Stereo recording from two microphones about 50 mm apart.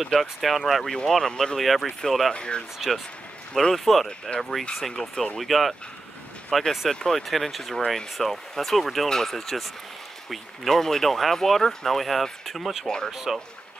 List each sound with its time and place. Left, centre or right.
0.0 s speech: centre
1.6 s speech: centre
2.3 s speech: centre
2.8 s speech: centre
3.7 s speech: centre
5.5 s speech: centre
12.8 s speech: centre
13.1 s speech: centre